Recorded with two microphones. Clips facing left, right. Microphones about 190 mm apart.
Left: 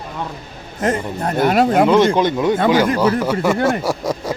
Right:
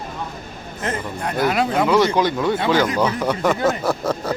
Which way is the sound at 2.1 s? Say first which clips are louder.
Left 3 dB; 20° left (ahead or behind).